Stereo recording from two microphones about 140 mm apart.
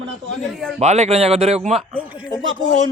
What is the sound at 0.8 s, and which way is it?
Speech, 50° right (ahead or behind).